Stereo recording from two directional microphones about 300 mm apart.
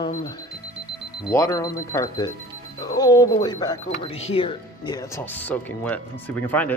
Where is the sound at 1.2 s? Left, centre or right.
Centre.